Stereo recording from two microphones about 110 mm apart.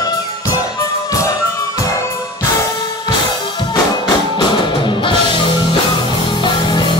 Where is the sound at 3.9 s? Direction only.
45° left (ahead or behind).